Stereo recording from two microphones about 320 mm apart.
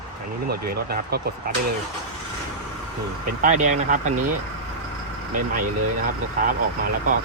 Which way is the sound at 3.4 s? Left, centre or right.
Right.